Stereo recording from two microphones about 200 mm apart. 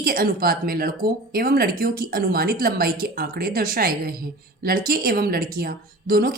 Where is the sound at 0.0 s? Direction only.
45° right (ahead or behind).